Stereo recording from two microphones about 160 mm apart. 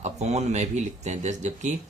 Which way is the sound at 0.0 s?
45° right (ahead or behind).